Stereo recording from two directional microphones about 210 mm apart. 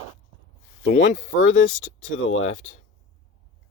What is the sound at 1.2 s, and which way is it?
Speech, 65° left (ahead or behind).